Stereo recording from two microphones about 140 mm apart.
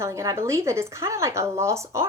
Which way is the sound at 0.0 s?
20° right (ahead or behind).